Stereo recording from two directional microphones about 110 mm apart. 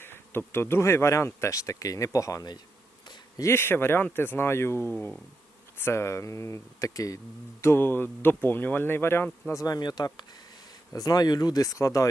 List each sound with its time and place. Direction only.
0.0 s speech: 20° left (ahead or behind)